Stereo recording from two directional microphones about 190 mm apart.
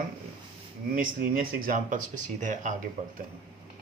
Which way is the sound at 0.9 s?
50° right (ahead or behind).